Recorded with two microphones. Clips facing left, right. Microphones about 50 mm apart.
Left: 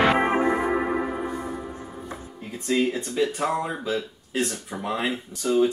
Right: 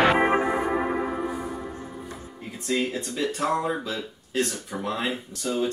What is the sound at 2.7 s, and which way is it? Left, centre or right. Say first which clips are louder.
Speech: left 3 dB; centre.